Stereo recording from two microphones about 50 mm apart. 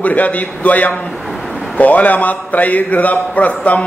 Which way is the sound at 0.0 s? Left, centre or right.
Left.